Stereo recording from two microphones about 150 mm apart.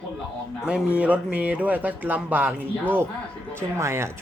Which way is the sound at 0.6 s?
5° right (ahead or behind).